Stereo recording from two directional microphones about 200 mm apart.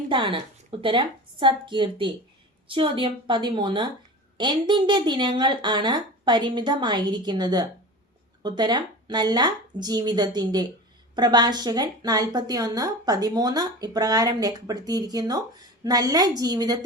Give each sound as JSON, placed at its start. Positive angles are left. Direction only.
{"t": 0.1, "sound": "a woman's voice", "side_deg": -25}